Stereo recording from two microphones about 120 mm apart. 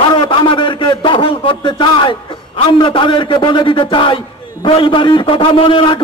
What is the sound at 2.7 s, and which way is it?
A man's voice, 45° left (ahead or behind).